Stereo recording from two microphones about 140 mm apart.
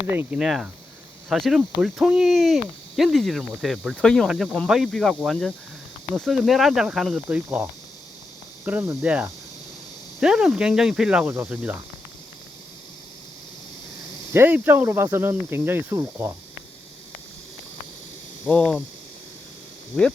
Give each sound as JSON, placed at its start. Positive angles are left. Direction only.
{"t": 0.1, "sound": "speech", "side_deg": -15}
{"t": 0.3, "sound": "speech", "side_deg": -5}
{"t": 14.3, "sound": "speech", "side_deg": -15}